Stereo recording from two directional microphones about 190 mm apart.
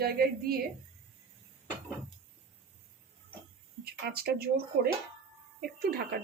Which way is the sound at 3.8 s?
55° right (ahead or behind).